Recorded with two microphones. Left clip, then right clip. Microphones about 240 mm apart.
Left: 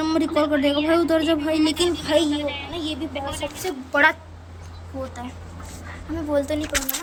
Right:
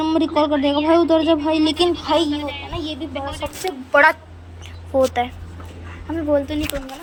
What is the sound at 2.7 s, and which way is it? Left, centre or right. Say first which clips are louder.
A woman's voice: right 1 dB; centre.